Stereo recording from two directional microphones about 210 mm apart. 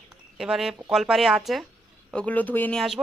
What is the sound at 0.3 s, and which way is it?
A woman's voice, centre (ahead or behind).